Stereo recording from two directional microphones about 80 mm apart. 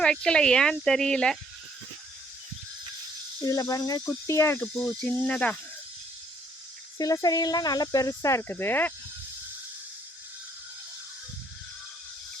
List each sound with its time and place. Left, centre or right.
0.0 s speech: centre
3.4 s speech: left
4.0 s cricket: left
4.6 s speech: centre
7.0 s speech: left